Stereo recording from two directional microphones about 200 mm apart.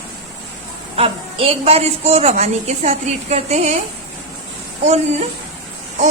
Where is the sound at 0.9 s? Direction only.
30° right (ahead or behind).